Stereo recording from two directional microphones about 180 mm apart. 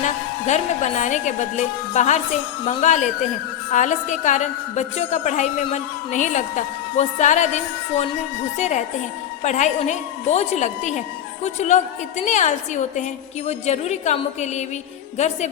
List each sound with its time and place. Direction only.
0.0 s a woman's voice: 40° left (ahead or behind)